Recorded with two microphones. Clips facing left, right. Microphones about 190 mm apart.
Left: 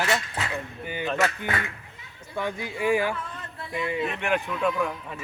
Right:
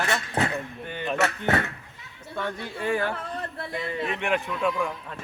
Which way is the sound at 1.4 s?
65° right (ahead or behind).